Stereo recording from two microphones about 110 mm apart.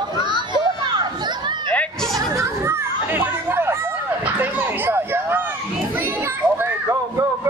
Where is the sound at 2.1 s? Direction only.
25° right (ahead or behind).